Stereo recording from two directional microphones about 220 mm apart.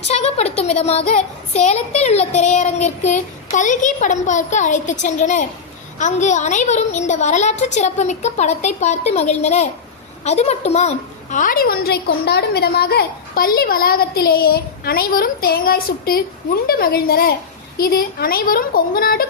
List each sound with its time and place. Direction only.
0.1 s a child's voice: 30° left (ahead or behind)